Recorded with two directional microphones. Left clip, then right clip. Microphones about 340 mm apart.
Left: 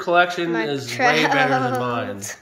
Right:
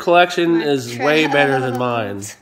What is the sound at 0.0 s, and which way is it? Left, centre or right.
Speech, right.